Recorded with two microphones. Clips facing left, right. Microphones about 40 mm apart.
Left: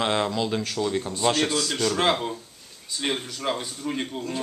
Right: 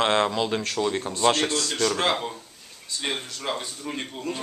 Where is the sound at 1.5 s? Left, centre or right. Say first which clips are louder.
Even; centre.